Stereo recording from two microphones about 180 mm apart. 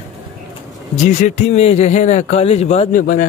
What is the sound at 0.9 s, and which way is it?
A man's voice, 40° left (ahead or behind).